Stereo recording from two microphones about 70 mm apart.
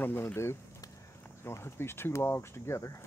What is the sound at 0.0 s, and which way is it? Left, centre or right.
Speech, left.